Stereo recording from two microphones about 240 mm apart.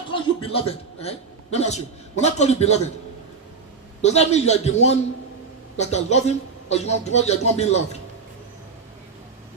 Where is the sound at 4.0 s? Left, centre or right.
Left.